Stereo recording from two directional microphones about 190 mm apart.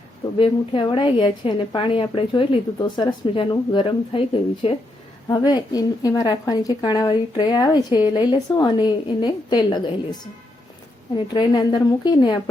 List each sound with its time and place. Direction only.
0.3 s a woman's voice: 25° left (ahead or behind)